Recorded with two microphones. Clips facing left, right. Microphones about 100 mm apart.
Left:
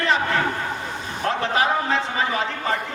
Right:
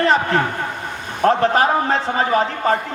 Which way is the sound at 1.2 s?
40° right (ahead or behind).